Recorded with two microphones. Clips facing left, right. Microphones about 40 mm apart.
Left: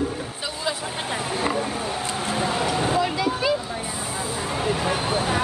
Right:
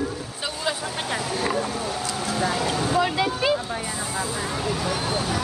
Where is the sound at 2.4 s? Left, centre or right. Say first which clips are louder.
Left 1 dB; left.